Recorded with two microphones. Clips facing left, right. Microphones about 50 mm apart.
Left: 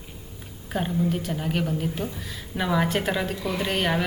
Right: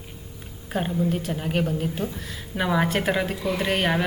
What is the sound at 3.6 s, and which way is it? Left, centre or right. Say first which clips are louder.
Speech: right 2 dB; right.